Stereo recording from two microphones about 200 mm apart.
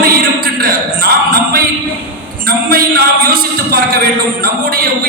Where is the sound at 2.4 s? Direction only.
45° right (ahead or behind).